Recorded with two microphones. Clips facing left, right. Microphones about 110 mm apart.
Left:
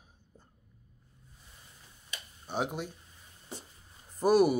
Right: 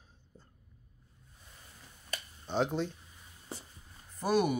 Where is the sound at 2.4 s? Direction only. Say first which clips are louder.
Right 3 dB; 10° left (ahead or behind).